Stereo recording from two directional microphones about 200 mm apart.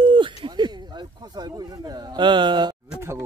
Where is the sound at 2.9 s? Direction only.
15° right (ahead or behind).